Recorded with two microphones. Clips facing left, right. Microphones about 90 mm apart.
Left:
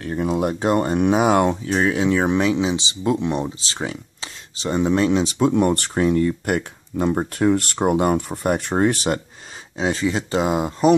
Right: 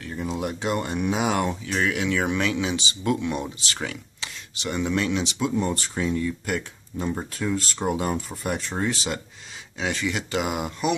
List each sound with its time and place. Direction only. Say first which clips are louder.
0.0 s speech: left 8 dB; 50° left (ahead or behind)
1.7 s speech: left 6 dB; 30° left (ahead or behind)
5.5 s speech: left 7 dB; 60° left (ahead or behind)
9.8 s speech: left 6 dB; 30° left (ahead or behind)